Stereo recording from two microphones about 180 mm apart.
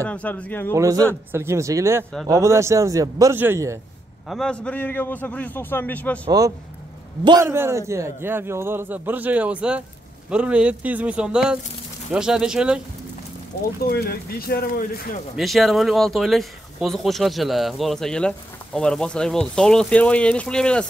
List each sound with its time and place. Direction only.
0.0 s a man's voice: 10° left (ahead or behind)
0.7 s a man's voice: 20° right (ahead or behind)
4.3 s a man's voice: 5° left (ahead or behind)
6.2 s a man's voice: 20° right (ahead or behind)
13.5 s speech: 60° left (ahead or behind)
15.3 s speech: centre (ahead or behind)